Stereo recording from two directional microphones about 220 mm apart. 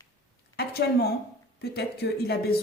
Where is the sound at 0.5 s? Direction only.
45° left (ahead or behind).